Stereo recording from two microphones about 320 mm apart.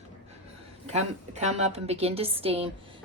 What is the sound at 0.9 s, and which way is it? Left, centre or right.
Speech, right.